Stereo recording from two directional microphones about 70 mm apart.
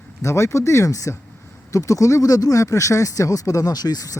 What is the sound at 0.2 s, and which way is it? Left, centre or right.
Speech, left.